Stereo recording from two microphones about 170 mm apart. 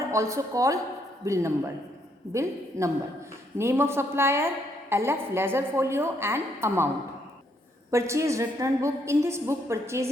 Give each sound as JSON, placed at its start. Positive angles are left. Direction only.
{"t": 0.1, "sound": "a woman's voice", "side_deg": -15}
{"t": 7.9, "sound": "a woman's voice", "side_deg": -15}